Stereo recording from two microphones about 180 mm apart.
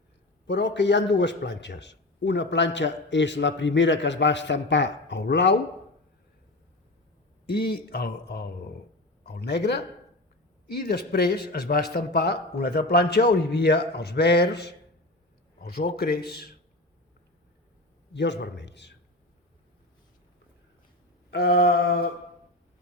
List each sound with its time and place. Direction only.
0.4 s a man's voice: 75° left (ahead or behind)
7.4 s a man's voice: 60° left (ahead or behind)
18.1 s a man's voice: 75° left (ahead or behind)
21.2 s speech: 65° left (ahead or behind)